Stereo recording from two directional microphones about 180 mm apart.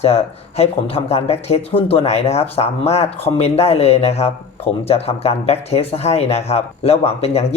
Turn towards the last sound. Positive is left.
turn(degrees=35)  # may be behind; listen again after turning